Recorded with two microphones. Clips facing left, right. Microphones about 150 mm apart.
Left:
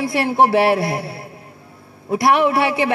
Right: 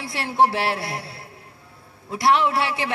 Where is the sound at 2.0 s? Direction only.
60° left (ahead or behind).